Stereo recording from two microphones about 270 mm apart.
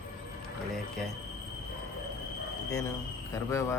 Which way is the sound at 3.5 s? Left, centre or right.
Centre.